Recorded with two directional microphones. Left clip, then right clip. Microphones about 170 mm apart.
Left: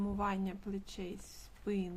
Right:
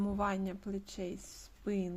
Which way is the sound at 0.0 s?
25° right (ahead or behind).